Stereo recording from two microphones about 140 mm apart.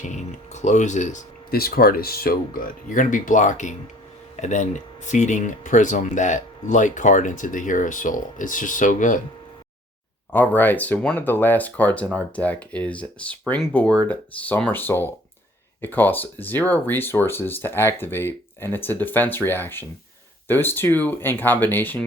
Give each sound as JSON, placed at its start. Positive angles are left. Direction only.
{"t": 0.1, "sound": "speech", "side_deg": 55}
{"t": 10.3, "sound": "speech", "side_deg": 10}